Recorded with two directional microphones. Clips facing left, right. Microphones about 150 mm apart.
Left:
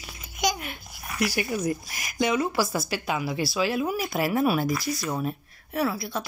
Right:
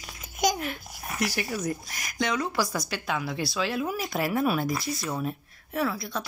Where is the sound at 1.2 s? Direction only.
10° left (ahead or behind).